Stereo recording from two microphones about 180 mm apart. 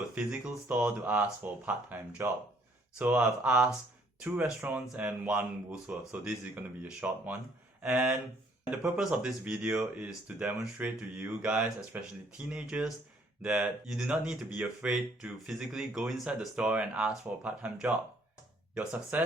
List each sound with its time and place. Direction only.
0.1 s speech: 5° right (ahead or behind)